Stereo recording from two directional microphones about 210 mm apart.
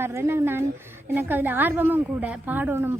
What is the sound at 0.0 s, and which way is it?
A woman's voice, 10° right (ahead or behind).